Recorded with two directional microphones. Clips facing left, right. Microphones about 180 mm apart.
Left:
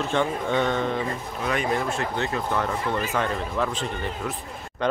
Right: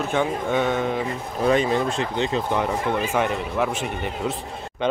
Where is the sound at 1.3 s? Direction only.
30° right (ahead or behind).